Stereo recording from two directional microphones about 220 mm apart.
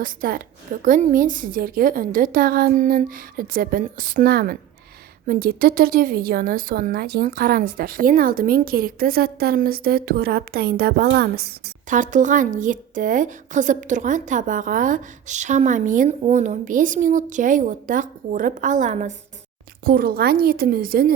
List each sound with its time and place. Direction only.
0.0 s a woman's voice: 40° right (ahead or behind)